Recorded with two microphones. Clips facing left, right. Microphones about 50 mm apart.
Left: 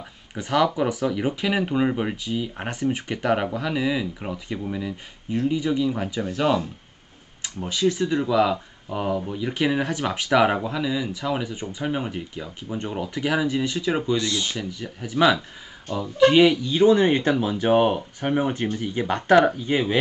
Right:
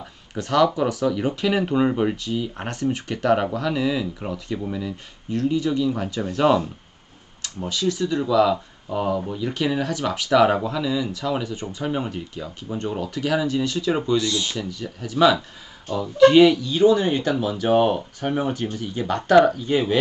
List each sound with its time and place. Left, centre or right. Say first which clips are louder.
0.3 s speech: right 2 dB; centre
6.2 s speech: right 4 dB; centre
7.4 s speech: left 1 dB; left